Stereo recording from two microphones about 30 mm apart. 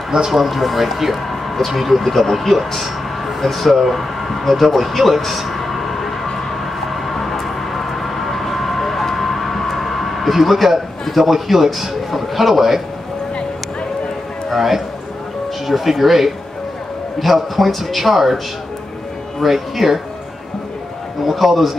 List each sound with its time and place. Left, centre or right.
0.3 s a man's voice: centre
6.9 s vehicle: centre
11.1 s a man's voice: centre
14.5 s a man's voice: centre
19.4 s speech: centre
21.2 s a man's voice: centre